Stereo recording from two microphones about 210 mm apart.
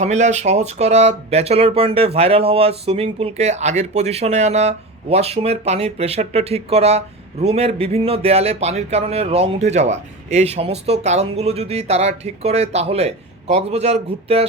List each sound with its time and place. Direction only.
0.0 s speech: 35° right (ahead or behind)